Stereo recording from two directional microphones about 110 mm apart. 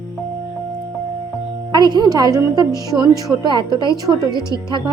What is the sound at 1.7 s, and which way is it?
A woman's voice, 40° right (ahead or behind).